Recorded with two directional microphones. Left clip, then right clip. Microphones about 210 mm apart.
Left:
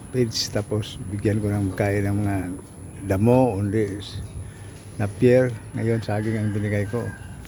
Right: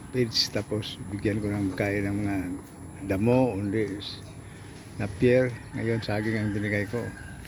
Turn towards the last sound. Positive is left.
turn(degrees=10)  # may be behind; listen again after turning